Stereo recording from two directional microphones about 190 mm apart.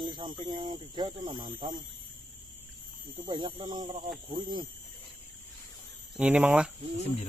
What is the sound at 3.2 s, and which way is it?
Speech, 25° right (ahead or behind).